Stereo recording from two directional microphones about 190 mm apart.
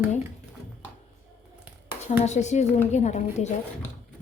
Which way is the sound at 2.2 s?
35° left (ahead or behind).